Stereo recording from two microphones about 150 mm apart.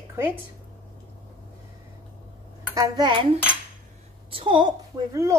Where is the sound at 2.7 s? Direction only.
25° right (ahead or behind).